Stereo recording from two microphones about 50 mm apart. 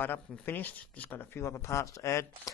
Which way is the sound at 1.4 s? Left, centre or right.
Left.